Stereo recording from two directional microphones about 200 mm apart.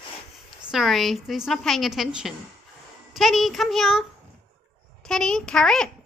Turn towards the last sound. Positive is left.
turn(degrees=5)  # may be behind; listen again after turning